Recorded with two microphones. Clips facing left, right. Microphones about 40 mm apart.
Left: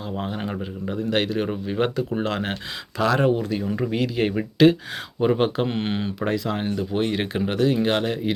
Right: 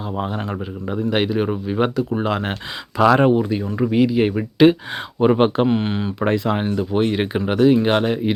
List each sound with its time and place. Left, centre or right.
0.0 s a sound: centre
0.9 s speech: centre
3.0 s speech: right
3.3 s speech: centre
4.5 s speech: centre
5.2 s speech: right
5.6 s speech: centre
6.1 s speech: right
6.7 s speech: centre